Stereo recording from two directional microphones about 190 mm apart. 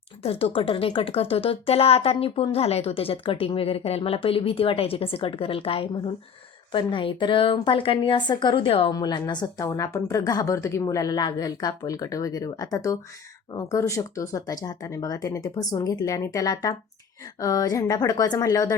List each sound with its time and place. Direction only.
0.2 s a woman's voice: 30° left (ahead or behind)